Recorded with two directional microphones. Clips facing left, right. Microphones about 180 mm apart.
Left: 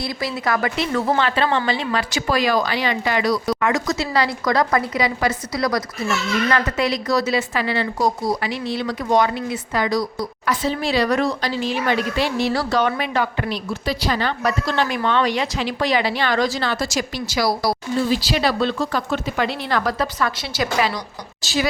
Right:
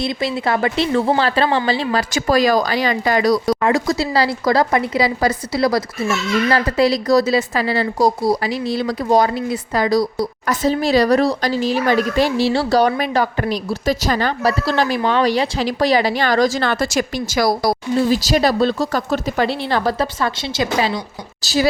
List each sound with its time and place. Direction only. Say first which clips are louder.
0.0 s a woman's voice: right 4 dB; 25° right (ahead or behind)
21.4 s a woman's voice: right 4 dB; 40° right (ahead or behind)